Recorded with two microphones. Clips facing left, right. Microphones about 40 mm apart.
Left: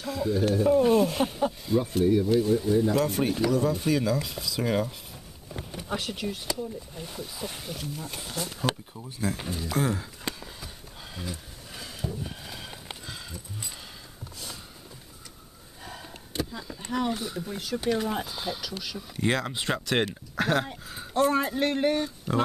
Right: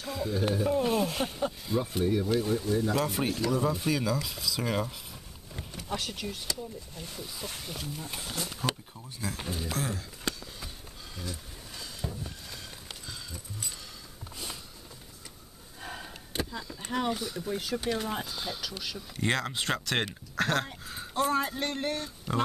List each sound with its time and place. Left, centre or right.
0.0 s speech: centre
2.6 s speech: centre
2.9 s speech: centre
8.6 s speech: centre
9.8 s speech: centre
11.1 s vehicle: centre
12.2 s a sound: centre
15.8 s a sound: centre
16.9 s speech: centre
17.2 s speech: centre
17.5 s speech: centre